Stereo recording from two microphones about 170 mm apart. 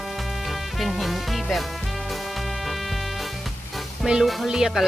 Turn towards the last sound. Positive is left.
turn(degrees=-5)  # may be behind; listen again after turning